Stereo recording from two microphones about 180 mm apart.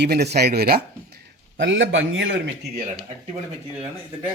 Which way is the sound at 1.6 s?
90° right.